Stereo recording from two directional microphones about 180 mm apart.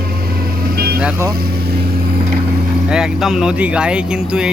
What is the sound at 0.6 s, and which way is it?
Vehicle, 55° right (ahead or behind).